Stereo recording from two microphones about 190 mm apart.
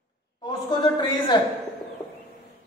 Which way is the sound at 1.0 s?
25° left (ahead or behind).